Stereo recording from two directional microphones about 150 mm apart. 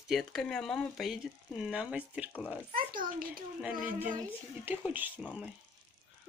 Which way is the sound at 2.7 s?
70° right (ahead or behind).